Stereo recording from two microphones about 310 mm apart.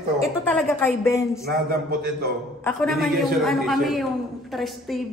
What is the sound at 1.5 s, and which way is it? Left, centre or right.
Speech, right.